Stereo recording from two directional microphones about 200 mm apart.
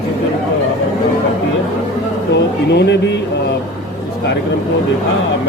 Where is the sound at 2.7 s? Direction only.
60° left (ahead or behind).